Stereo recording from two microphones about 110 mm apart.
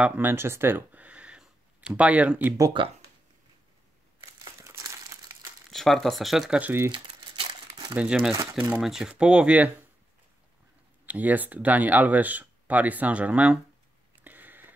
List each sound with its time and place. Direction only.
0.0 s speech: 20° right (ahead or behind)
2.8 s speech: 50° right (ahead or behind)
4.6 s crumpling: 30° right (ahead or behind)
5.7 s speech: 5° left (ahead or behind)
6.6 s speech: 20° right (ahead or behind)
6.9 s crumpling: 40° right (ahead or behind)
7.9 s speech: 10° right (ahead or behind)
11.1 s speech: 15° right (ahead or behind)
14.2 s a sound: 15° right (ahead or behind)